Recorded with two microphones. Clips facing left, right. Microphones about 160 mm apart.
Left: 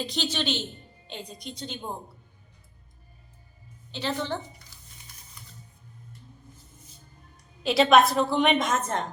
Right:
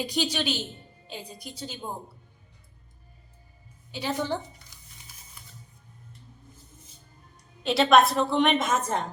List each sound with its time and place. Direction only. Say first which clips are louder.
0.0 s a woman's voice: right 2 dB; 10° right (ahead or behind)
3.9 s a woman's voice: right 1 dB; 10° right (ahead or behind)
4.7 s a sound: left 1 dB; 15° right (ahead or behind)
7.6 s a woman's voice: left 1 dB; centre (ahead or behind)